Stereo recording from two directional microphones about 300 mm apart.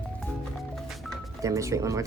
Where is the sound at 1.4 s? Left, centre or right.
Centre.